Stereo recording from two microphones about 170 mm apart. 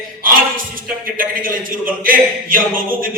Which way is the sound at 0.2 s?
55° right (ahead or behind).